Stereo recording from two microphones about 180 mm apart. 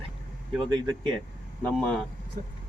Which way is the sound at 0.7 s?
25° right (ahead or behind).